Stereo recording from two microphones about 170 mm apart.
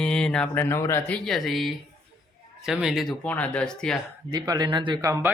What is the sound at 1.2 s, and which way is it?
Speech, centre (ahead or behind).